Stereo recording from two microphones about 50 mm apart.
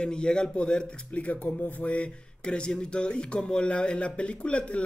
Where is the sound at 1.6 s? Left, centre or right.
Left.